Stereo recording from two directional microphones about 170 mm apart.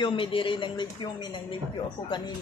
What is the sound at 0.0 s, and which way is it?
Speech, 30° left (ahead or behind).